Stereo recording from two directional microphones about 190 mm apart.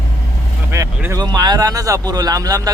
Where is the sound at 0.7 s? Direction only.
15° right (ahead or behind).